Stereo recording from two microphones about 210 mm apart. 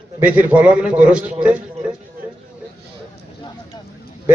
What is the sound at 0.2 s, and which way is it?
A man's voice, 10° right (ahead or behind).